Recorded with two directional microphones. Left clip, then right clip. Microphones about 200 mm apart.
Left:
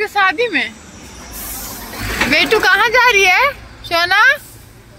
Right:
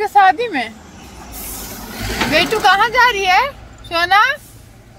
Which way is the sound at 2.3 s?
Centre (ahead or behind).